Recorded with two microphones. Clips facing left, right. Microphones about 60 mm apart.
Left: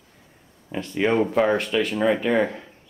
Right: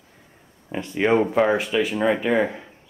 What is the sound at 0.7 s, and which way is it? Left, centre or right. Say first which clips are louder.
Speech: right 2 dB; centre.